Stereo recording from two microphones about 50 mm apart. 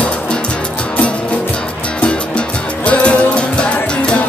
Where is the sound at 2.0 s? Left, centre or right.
Left.